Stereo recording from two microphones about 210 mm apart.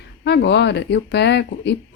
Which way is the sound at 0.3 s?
55° left (ahead or behind).